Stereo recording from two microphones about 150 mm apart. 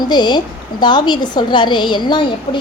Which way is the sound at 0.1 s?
30° left (ahead or behind).